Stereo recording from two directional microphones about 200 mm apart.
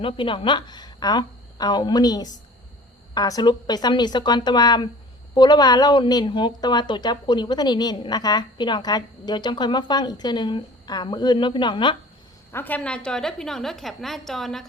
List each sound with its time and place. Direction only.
0.0 s a woman's voice: 25° left (ahead or behind)
12.5 s a woman's voice: 10° left (ahead or behind)